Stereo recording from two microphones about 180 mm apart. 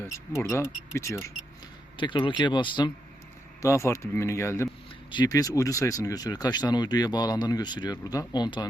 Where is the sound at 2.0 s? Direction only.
25° left (ahead or behind).